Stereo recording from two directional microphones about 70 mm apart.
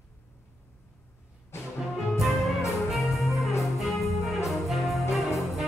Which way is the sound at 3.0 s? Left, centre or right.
Left.